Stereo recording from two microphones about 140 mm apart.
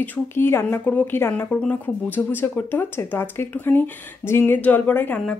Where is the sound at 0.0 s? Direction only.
15° left (ahead or behind).